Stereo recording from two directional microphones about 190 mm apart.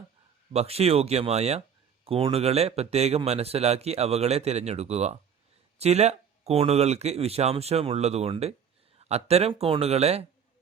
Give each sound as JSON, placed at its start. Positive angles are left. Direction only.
{"t": 0.5, "sound": "speech", "side_deg": -35}